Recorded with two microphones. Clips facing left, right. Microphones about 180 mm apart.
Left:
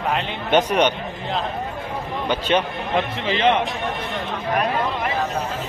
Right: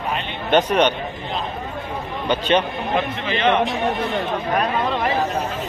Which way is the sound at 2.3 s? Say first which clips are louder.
Right 2 dB; 10° left (ahead or behind).